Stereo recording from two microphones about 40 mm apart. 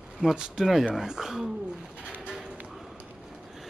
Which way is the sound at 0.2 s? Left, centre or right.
Right.